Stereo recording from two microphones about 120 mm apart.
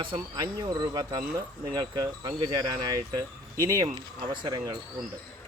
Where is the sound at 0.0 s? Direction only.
35° right (ahead or behind).